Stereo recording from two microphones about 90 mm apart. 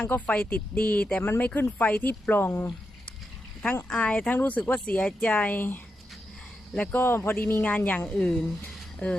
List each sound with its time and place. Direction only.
0.0 s speech: 15° left (ahead or behind)
3.8 s speech: 15° left (ahead or behind)
6.9 s speech: 25° left (ahead or behind); by 8.4 s 5° left (ahead or behind)
8.6 s a sound: 15° left (ahead or behind)